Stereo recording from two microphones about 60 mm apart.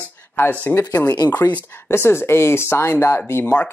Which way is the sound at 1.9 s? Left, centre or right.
Left.